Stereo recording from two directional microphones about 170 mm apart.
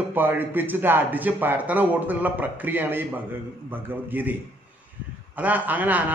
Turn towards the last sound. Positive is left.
turn(degrees=-10)  # may be behind; listen again after turning